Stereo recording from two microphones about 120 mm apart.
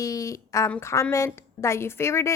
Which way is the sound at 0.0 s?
30° left (ahead or behind).